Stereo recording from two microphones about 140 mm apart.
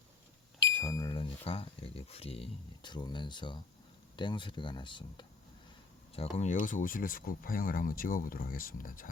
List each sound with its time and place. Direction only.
0.7 s a sound: 20° left (ahead or behind)
1.2 s speech: 40° left (ahead or behind)
6.1 s speech: 55° left (ahead or behind); by 9.0 s 90° left